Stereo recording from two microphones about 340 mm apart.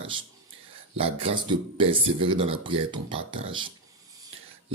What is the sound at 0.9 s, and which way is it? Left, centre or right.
Speech, centre.